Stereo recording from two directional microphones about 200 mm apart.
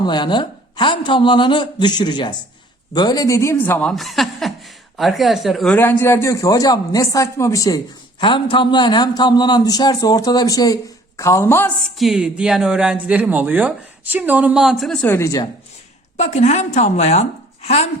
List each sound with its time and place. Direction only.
0.0 s a man's voice: 20° left (ahead or behind)
11.9 s speech: centre (ahead or behind); by 15.4 s 15° left (ahead or behind)
16.1 s a woman's voice: 35° left (ahead or behind)